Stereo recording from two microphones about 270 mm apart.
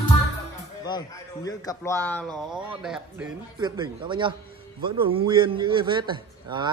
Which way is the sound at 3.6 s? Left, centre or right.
Centre.